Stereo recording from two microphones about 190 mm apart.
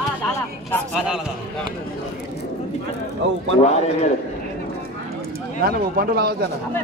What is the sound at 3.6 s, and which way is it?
Speech, 35° left (ahead or behind).